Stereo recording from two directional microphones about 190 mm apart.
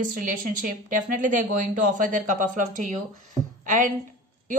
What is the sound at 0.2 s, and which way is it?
A woman's voice, 45° right (ahead or behind).